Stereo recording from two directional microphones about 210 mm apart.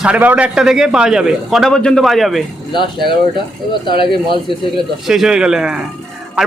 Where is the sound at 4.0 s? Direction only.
25° left (ahead or behind).